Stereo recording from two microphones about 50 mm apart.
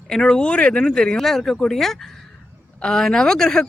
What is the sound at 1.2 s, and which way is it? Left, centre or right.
Speech, centre.